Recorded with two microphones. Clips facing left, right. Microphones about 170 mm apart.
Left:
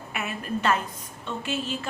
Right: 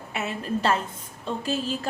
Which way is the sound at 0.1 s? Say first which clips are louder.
Right 2 dB; 25° right (ahead or behind).